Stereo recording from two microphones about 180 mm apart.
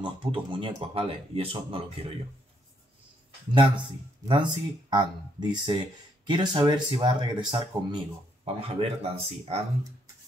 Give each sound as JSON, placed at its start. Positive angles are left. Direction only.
{"t": 0.0, "sound": "speech", "side_deg": -30}
{"t": 4.3, "sound": "speech", "side_deg": -25}